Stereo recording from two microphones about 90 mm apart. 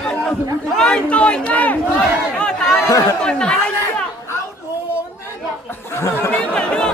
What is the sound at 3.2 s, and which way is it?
Speech, 10° left (ahead or behind).